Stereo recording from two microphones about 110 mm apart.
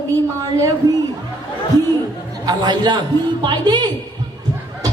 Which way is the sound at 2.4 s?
40° right (ahead or behind).